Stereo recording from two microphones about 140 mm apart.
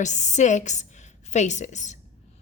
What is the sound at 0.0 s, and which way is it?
A woman's voice, 60° left (ahead or behind).